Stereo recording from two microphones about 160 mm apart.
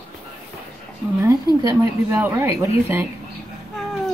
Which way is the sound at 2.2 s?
15° right (ahead or behind).